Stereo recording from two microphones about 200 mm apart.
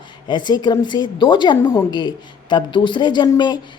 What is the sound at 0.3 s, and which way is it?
A woman's voice, 20° left (ahead or behind).